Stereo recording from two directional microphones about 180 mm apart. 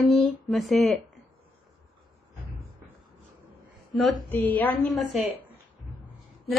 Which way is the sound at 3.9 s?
Centre (ahead or behind).